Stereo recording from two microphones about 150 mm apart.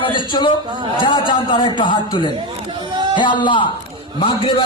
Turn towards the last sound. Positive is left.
turn(degrees=35)  # may be behind; listen again after turning